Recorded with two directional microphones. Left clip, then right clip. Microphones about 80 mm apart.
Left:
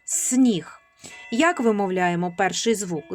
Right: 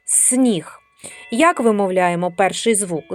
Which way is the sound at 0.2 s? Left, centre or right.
Right.